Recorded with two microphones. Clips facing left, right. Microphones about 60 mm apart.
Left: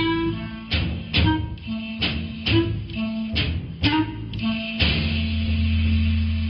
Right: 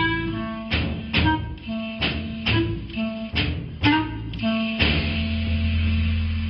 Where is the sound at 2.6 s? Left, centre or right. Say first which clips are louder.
Left 4 dB; centre.